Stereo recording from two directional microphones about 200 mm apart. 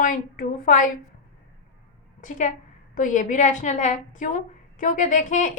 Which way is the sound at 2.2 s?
40° left (ahead or behind).